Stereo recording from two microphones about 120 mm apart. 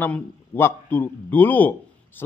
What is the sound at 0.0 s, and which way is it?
A man's voice, 15° left (ahead or behind).